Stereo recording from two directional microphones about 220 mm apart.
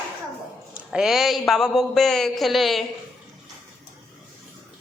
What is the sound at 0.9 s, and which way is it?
Speech, centre (ahead or behind).